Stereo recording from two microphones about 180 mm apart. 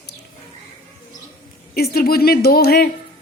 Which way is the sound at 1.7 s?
55° left (ahead or behind).